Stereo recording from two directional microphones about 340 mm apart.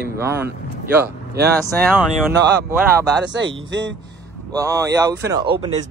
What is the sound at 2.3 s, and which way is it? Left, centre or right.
Speech, right.